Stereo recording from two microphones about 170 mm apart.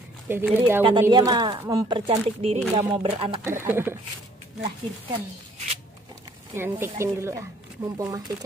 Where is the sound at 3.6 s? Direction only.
15° right (ahead or behind).